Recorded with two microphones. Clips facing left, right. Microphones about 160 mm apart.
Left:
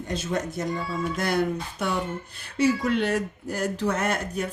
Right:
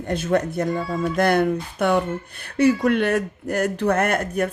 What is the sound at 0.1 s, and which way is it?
Speech, 60° right (ahead or behind).